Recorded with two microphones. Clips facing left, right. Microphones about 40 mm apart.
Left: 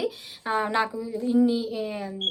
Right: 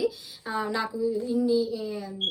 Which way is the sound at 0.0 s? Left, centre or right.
Left.